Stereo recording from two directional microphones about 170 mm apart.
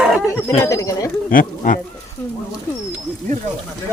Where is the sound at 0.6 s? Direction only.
20° left (ahead or behind).